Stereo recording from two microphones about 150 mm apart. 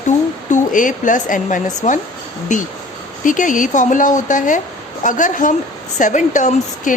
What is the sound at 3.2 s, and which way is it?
A woman's voice, 60° left (ahead or behind).